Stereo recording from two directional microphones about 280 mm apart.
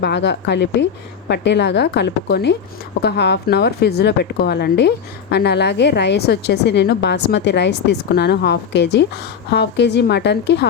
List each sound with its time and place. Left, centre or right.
0.0 s speech: left